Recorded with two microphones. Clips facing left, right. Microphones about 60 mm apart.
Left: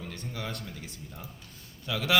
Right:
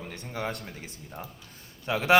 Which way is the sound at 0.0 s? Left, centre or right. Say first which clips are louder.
Right 4 dB; right.